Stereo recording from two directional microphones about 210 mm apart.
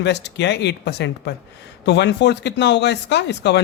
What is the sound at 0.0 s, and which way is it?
Speech, 55° left (ahead or behind).